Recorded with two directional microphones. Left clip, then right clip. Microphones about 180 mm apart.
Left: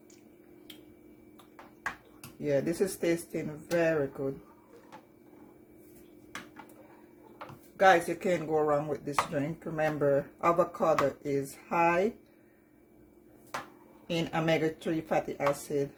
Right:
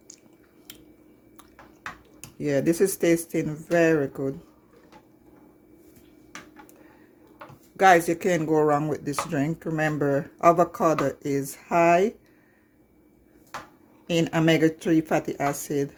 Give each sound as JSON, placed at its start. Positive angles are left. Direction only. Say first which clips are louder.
{"t": 2.4, "sound": "speech", "louder": "right 6 dB", "side_deg": -65}
{"t": 7.8, "sound": "speech", "louder": "right 6 dB", "side_deg": -65}
{"t": 14.1, "sound": "speech", "louder": "right 7 dB", "side_deg": -65}